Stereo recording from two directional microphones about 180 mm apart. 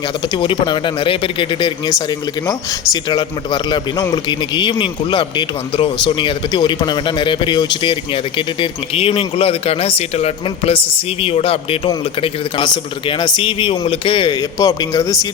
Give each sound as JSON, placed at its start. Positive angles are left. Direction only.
{"t": 0.3, "sound": "speech", "side_deg": 25}